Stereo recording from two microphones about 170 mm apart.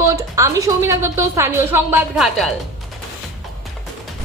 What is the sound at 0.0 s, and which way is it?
A woman's voice, 20° right (ahead or behind).